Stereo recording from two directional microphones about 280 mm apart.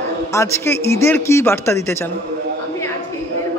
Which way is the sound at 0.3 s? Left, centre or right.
Centre.